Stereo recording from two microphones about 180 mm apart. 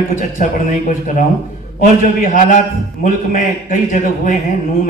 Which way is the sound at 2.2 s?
45° left (ahead or behind).